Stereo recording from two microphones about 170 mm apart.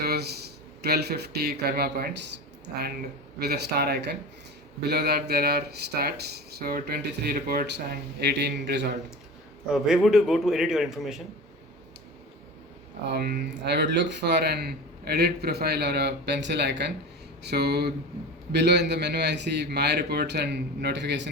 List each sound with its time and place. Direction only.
0.0 s a sound: 70° right (ahead or behind)
0.8 s speech: 70° right (ahead or behind); by 2.4 s 90° right
3.3 s speech: 70° right (ahead or behind)
9.6 s a man's voice: 5° right (ahead or behind)
13.1 s speech: 70° right (ahead or behind); by 16.9 s 85° right
17.4 s speech: 75° right (ahead or behind); by 21.2 s 90° right